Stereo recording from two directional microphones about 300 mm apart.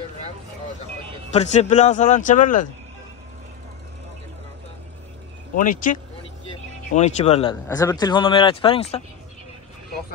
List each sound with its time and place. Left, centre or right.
1.3 s a man's voice: left
5.6 s a man's voice: left